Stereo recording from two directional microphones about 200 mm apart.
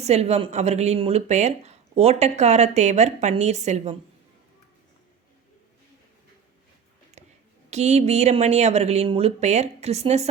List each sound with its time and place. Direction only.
0.0 s speech: 35° right (ahead or behind)
7.2 s a sound: 35° right (ahead or behind)
7.7 s speech: 35° right (ahead or behind)